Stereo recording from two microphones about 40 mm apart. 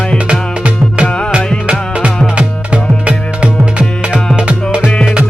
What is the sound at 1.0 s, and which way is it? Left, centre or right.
Music, left.